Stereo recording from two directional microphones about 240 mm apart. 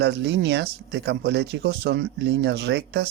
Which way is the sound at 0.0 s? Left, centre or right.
Right.